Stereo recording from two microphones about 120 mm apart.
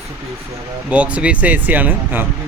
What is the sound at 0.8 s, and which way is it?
Speech, 10° right (ahead or behind).